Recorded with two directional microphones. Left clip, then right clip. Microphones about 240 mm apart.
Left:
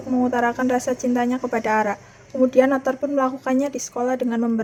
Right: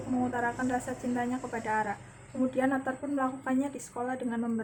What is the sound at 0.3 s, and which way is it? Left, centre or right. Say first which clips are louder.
A woman's voice: left 12 dB; left.